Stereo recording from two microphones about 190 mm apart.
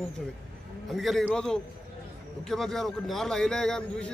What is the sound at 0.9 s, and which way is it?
A man's voice, centre (ahead or behind).